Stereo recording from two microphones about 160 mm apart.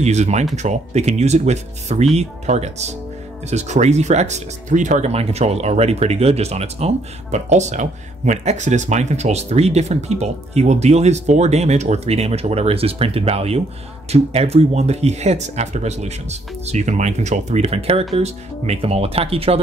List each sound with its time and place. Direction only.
0.0 s speech: 45° right (ahead or behind)